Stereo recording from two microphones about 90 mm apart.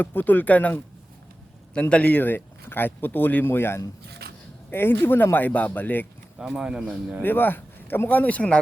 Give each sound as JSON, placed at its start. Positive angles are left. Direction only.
{"t": 0.0, "sound": "speech", "side_deg": 20}
{"t": 6.4, "sound": "speech", "side_deg": -10}
{"t": 7.2, "sound": "speech", "side_deg": 20}